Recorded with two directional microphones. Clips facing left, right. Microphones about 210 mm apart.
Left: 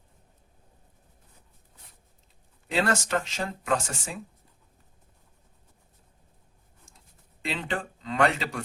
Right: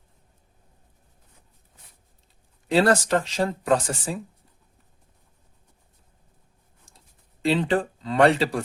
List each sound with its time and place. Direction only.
2.6 s speech: 35° right (ahead or behind)
7.4 s speech: 35° right (ahead or behind)